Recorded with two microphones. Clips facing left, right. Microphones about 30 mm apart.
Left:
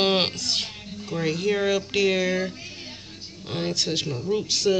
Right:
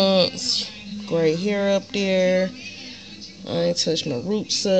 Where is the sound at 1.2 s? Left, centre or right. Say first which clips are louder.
Right 7 dB; right.